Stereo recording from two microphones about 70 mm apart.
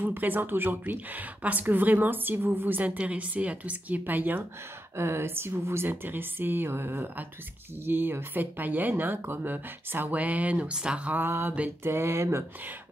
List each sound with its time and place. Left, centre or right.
0.0 s a woman's voice: right
11.1 s speech: right